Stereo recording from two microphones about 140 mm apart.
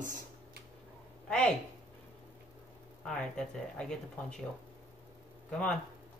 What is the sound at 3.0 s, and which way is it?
Speech, 5° left (ahead or behind).